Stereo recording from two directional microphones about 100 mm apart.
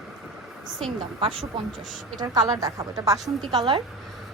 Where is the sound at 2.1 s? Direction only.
40° right (ahead or behind).